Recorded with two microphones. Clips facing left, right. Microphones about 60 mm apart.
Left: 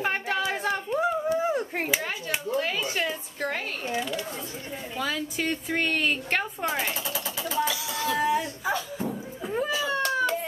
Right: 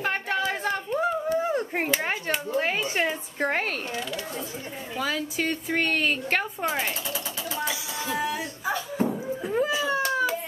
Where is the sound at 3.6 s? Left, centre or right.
Right.